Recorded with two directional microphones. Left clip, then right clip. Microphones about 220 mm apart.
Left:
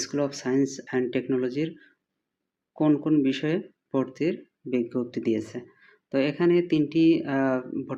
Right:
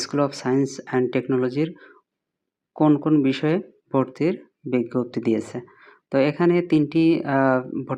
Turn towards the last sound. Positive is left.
turn(degrees=-20)  # may be behind; listen again after turning